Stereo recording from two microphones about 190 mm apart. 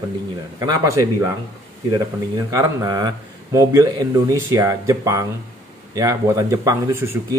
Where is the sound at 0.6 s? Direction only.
20° right (ahead or behind).